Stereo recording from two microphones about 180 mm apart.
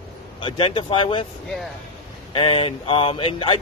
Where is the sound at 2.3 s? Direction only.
30° left (ahead or behind).